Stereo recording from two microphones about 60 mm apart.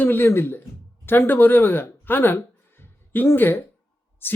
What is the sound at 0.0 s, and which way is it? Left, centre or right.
A man's voice, left.